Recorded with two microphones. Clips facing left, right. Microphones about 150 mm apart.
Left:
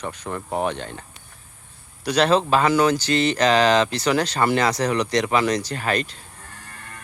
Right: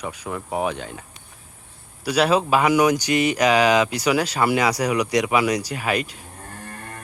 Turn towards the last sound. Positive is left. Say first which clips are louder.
# right 6 dB
turn(degrees=-40)  # may be behind; listen again after turning